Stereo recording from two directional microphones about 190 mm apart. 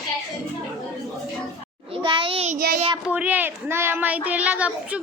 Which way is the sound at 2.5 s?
50° right (ahead or behind).